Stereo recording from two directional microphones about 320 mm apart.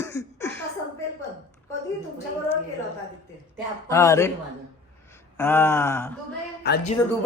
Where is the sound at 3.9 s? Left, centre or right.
Centre.